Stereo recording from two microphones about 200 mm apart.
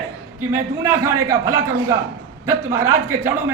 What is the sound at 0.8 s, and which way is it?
A man's voice, 15° right (ahead or behind).